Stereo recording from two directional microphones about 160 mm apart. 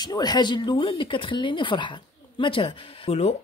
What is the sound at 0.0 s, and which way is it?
Speech, 25° left (ahead or behind).